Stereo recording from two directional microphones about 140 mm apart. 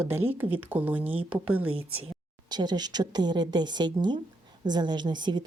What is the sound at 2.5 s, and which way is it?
Speech, 30° right (ahead or behind).